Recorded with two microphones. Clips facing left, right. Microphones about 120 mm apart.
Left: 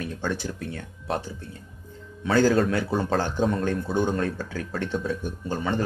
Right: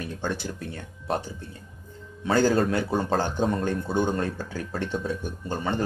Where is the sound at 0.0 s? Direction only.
Centre (ahead or behind).